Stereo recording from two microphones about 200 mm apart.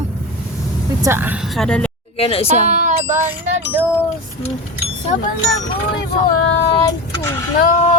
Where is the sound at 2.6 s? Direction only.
35° right (ahead or behind).